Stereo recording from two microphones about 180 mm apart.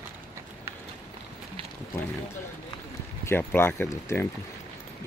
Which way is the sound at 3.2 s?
10° left (ahead or behind).